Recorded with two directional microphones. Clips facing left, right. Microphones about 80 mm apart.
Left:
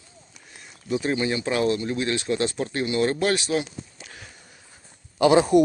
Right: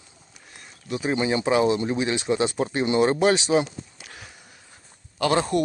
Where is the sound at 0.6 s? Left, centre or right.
Centre.